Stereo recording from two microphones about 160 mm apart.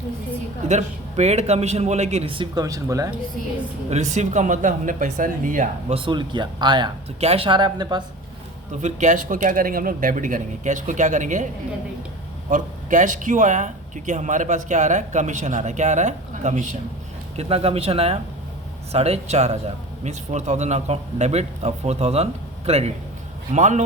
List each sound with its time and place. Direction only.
0.7 s speech: 45° right (ahead or behind); by 3.1 s 20° right (ahead or behind)
3.8 s speech: 45° right (ahead or behind)
5.9 s speech: 30° right (ahead or behind)
8.8 s speech: 50° right (ahead or behind)
12.5 s speech: 55° right (ahead or behind)